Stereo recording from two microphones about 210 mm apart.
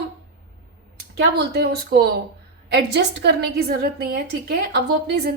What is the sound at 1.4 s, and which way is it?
A woman's voice, 50° right (ahead or behind).